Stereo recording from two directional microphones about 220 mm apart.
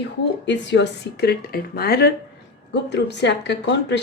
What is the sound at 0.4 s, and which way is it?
Speech, 55° left (ahead or behind).